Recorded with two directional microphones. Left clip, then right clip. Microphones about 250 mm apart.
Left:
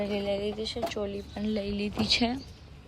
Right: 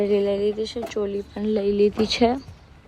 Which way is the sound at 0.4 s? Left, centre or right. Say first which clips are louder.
Right 9 dB; centre.